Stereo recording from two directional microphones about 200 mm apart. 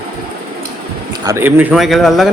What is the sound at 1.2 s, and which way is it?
Speech, 10° right (ahead or behind).